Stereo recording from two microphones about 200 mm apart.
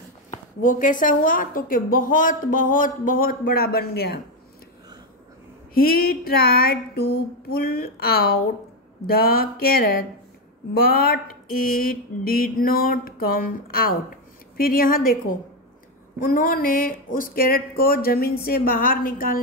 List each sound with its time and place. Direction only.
0.3 s a woman's voice: 40° left (ahead or behind)
5.8 s a woman's voice: 50° left (ahead or behind)